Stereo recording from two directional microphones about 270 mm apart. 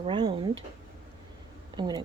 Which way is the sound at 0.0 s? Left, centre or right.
Centre.